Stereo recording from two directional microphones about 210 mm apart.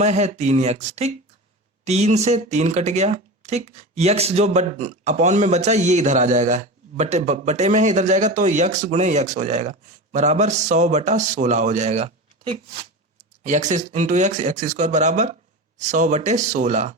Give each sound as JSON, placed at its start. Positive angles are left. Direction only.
{"t": 0.0, "sound": "speech", "side_deg": -35}